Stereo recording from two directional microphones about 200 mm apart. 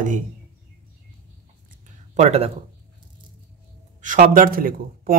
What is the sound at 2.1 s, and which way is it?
Speech, 30° right (ahead or behind).